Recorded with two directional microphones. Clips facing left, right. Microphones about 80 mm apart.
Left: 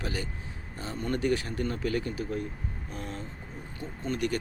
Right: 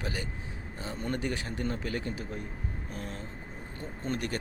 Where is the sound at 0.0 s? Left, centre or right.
Centre.